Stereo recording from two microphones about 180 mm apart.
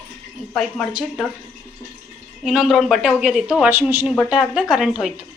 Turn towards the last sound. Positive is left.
turn(degrees=-5)  # may be behind; listen again after turning